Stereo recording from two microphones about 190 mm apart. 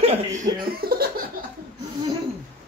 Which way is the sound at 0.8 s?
55° right (ahead or behind).